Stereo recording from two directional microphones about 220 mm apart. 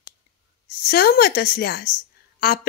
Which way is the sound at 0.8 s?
45° left (ahead or behind).